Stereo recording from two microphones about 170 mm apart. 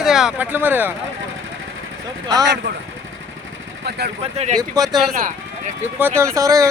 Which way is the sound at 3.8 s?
70° right (ahead or behind).